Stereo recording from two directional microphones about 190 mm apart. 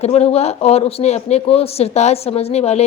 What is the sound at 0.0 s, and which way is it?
Speech, 35° left (ahead or behind).